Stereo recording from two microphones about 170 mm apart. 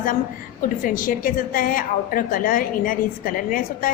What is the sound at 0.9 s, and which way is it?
A woman's voice, 55° left (ahead or behind).